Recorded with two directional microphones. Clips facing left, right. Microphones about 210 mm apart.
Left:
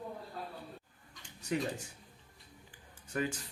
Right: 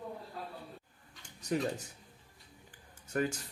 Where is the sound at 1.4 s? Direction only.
40° right (ahead or behind).